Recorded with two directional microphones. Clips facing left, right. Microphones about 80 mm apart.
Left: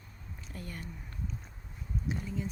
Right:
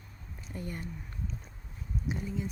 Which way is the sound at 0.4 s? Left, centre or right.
Right.